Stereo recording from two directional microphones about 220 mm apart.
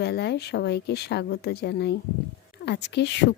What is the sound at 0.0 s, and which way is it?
A woman's voice, 50° left (ahead or behind).